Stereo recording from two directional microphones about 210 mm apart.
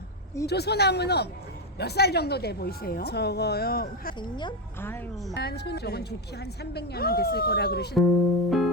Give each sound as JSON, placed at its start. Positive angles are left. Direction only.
{"t": 0.4, "sound": "a woman's voice", "side_deg": 50}
{"t": 4.2, "sound": "speech", "side_deg": 20}
{"t": 4.8, "sound": "speech", "side_deg": 10}
{"t": 5.4, "sound": "a woman's voice", "side_deg": 50}
{"t": 7.9, "sound": "music", "side_deg": 0}